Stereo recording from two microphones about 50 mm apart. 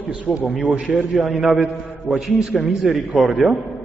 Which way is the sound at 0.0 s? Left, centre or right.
Right.